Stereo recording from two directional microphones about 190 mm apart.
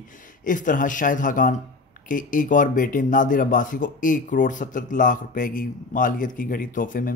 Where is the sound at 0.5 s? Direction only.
45° left (ahead or behind).